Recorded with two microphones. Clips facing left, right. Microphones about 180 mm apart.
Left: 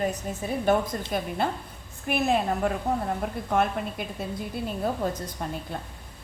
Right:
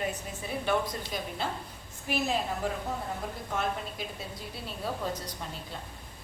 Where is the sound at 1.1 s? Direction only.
55° left (ahead or behind).